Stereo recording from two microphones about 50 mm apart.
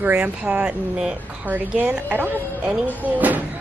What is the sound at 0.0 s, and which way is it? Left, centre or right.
Speech, right.